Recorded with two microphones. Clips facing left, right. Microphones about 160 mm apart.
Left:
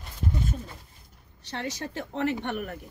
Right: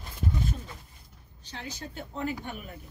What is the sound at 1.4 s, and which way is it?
Speech, 70° left (ahead or behind).